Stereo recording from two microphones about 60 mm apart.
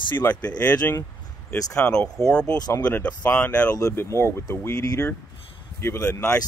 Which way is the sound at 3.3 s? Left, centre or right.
Left.